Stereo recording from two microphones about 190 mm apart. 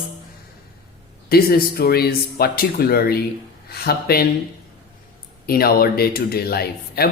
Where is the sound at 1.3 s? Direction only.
50° left (ahead or behind).